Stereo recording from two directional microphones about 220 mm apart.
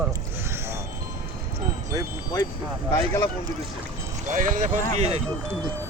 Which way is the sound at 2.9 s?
10° left (ahead or behind).